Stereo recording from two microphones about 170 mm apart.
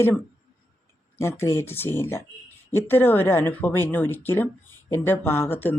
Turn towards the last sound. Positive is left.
turn(degrees=10)  # may be behind; listen again after turning